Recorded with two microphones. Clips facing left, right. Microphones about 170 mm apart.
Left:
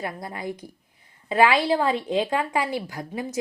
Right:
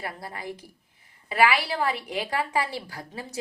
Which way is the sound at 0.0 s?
20° left (ahead or behind).